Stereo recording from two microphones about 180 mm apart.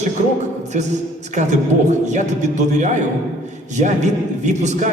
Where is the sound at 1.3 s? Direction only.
40° right (ahead or behind).